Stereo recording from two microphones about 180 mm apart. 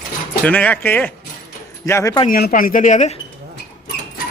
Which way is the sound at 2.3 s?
55° left (ahead or behind).